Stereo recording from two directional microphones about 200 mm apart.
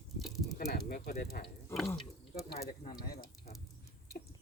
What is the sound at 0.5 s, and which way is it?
Speech, 50° left (ahead or behind).